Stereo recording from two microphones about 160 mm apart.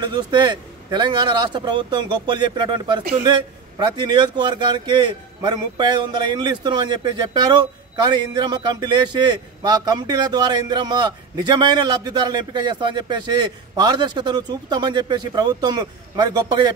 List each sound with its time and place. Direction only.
0.0 s a man's voice: 30° right (ahead or behind)